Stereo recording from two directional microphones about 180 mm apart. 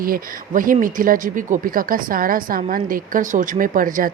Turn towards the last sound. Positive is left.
turn(degrees=-50)  # may be behind; listen again after turning